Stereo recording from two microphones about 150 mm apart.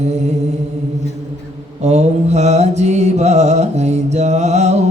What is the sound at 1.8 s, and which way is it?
Mantra, 50° right (ahead or behind).